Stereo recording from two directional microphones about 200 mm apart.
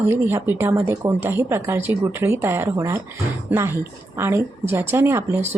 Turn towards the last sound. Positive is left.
turn(degrees=-10)  # may be behind; listen again after turning